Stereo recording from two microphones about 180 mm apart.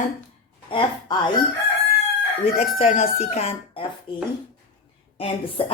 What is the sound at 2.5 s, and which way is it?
Speech, 35° left (ahead or behind).